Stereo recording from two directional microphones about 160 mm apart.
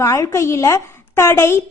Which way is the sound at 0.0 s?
20° left (ahead or behind).